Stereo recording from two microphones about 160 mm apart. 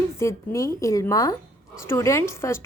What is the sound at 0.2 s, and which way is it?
Speech, 20° left (ahead or behind).